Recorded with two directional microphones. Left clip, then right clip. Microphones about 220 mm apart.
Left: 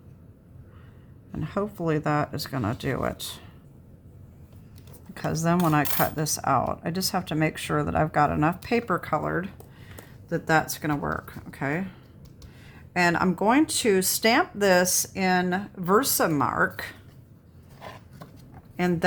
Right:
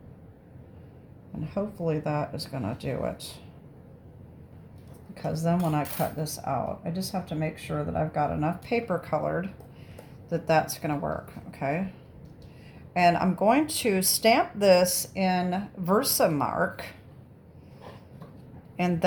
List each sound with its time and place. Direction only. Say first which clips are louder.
1.4 s speech: left 3 dB; 30° left (ahead or behind)
5.1 s speech: left 3 dB; 35° left (ahead or behind)
12.9 s speech: right 1 dB; 35° left (ahead or behind)
18.8 s speech: left 2 dB; 30° left (ahead or behind)